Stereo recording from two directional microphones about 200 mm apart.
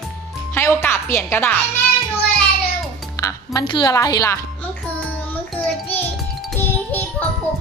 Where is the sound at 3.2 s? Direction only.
20° left (ahead or behind).